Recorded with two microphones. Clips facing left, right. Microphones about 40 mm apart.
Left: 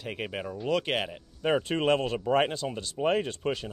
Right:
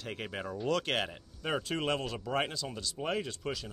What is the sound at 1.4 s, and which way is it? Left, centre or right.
Speech, left.